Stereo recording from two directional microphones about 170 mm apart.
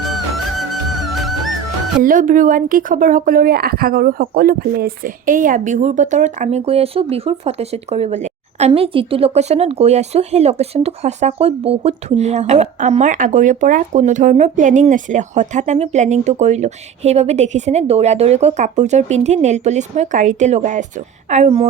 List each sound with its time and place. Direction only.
1.0 s music: centre (ahead or behind)
2.0 s a woman's voice: 50° right (ahead or behind)